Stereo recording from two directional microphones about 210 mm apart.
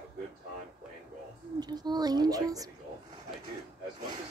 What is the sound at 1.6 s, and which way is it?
A woman's voice, 20° right (ahead or behind).